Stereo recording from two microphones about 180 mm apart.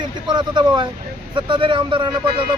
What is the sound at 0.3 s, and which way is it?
Speech, 25° right (ahead or behind).